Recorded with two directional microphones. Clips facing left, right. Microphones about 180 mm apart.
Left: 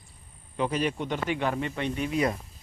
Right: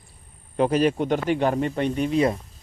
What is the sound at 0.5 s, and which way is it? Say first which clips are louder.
Speech: right 8 dB; 45° right (ahead or behind).